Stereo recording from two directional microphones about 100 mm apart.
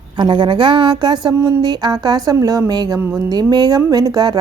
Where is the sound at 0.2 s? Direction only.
55° right (ahead or behind).